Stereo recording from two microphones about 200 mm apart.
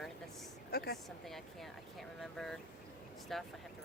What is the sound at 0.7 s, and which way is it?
Speech, 50° left (ahead or behind).